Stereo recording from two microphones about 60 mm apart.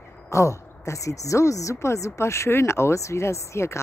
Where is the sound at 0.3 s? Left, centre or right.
Left.